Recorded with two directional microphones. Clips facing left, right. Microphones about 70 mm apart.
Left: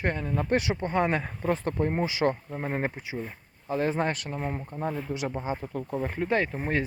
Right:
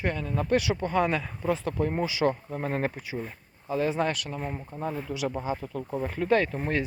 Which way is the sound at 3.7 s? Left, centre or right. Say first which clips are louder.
Even; left.